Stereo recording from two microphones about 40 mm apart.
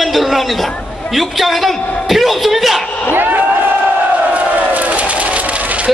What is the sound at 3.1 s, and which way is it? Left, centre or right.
Crowd, right.